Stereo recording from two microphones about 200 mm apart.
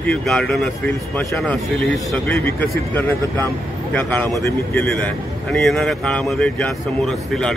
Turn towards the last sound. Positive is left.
turn(degrees=0)  # may be behind; listen again after turning